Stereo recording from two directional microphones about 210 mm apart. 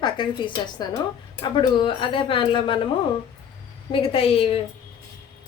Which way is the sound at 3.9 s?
25° left (ahead or behind).